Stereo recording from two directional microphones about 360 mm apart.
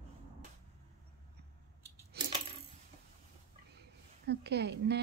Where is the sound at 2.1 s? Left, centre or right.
Right.